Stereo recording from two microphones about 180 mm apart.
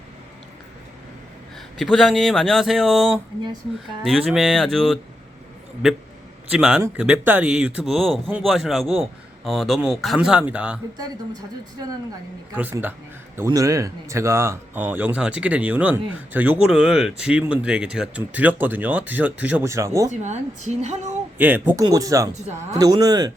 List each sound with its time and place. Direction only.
1.8 s a man's voice: centre (ahead or behind)
6.5 s a man's voice: 5° right (ahead or behind)
12.5 s speech: 10° right (ahead or behind)
20.1 s a woman's voice: 40° right (ahead or behind)
21.3 s speech: 10° right (ahead or behind)
22.3 s a woman's voice: 40° right (ahead or behind)
22.7 s speech: 20° right (ahead or behind)